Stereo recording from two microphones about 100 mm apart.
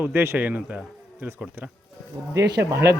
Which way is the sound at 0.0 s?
20° right (ahead or behind).